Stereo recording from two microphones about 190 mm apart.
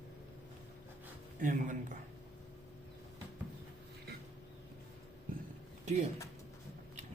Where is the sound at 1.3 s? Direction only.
45° right (ahead or behind).